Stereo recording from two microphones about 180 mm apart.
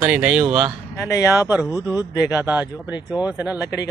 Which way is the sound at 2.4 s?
10° right (ahead or behind).